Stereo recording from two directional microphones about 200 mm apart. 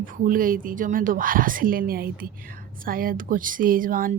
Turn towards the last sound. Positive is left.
turn(degrees=-45)  # may be behind; listen again after turning